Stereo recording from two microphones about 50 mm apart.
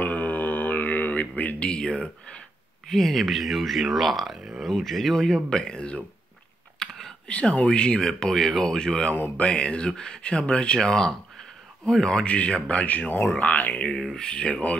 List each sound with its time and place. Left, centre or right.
0.0 s mantra: left
1.6 s speech: left
2.9 s speech: centre
6.8 s computer keyboard: centre
7.6 s speech: centre
12.4 s speech: left
13.4 s a sound: left
14.1 s speech: centre